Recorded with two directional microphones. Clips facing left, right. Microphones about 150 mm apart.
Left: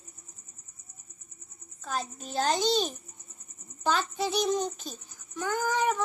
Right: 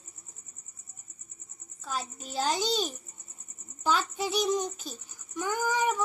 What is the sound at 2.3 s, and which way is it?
Speech, 10° right (ahead or behind).